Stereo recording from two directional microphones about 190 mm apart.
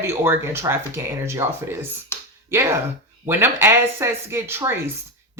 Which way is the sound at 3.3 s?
10° right (ahead or behind).